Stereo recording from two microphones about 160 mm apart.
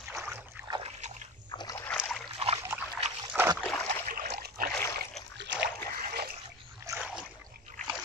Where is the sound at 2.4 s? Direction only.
40° right (ahead or behind).